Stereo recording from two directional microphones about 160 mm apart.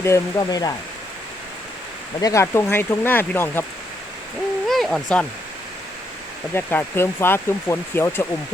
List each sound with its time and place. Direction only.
0.0 s speech: 20° left (ahead or behind)
2.2 s speech: 20° left (ahead or behind)
4.7 s owl: centre (ahead or behind)
6.5 s speech: 15° left (ahead or behind)